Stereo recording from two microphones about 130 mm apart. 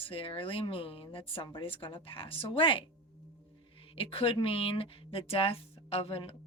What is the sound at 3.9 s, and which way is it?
A woman's voice, 45° left (ahead or behind).